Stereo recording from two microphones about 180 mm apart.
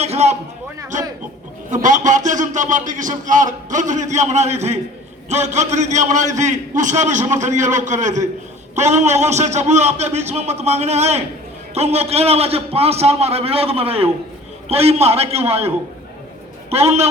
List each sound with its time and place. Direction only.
0.0 s a man's voice: 35° right (ahead or behind)
1.7 s a man's voice: 45° right (ahead or behind)